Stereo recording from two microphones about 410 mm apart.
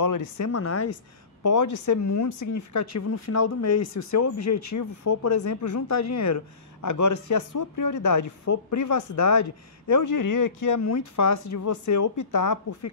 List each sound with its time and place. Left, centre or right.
0.0 s speech: left
1.4 s speech: left